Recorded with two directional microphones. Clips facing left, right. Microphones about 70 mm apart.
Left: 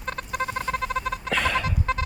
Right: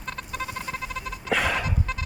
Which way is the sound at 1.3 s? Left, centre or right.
Centre.